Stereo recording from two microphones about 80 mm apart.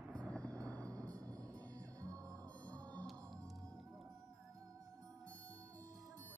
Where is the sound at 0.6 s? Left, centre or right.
Centre.